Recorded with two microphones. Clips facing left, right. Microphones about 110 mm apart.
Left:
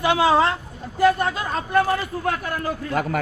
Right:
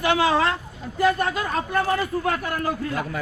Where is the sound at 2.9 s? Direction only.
65° left (ahead or behind).